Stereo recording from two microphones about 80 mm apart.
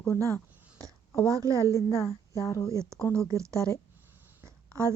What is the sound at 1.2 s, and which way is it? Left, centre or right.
Speech, right.